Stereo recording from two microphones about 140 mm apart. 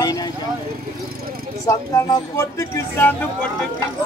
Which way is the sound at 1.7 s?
20° left (ahead or behind).